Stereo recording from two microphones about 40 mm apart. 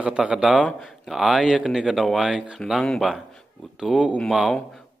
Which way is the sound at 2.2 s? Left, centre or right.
Right.